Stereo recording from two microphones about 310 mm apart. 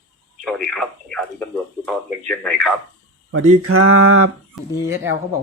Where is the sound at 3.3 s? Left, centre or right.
Right.